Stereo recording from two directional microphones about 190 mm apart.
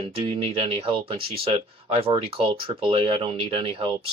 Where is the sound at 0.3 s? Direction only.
30° right (ahead or behind).